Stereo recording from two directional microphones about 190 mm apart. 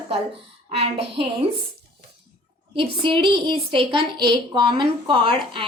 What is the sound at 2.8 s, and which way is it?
A woman's voice, 25° right (ahead or behind).